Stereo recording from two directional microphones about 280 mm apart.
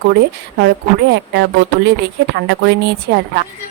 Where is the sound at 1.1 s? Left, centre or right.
Right.